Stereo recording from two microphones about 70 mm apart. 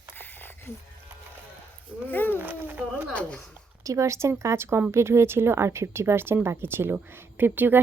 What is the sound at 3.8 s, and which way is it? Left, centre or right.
A woman's voice, right.